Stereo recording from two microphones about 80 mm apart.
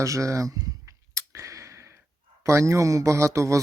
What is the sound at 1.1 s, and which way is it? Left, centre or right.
Clicking, right.